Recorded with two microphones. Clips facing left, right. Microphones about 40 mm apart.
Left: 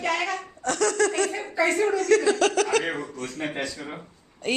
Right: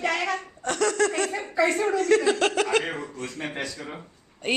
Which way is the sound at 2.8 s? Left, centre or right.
Centre.